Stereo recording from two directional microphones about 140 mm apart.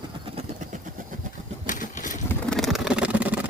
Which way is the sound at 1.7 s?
70° left (ahead or behind).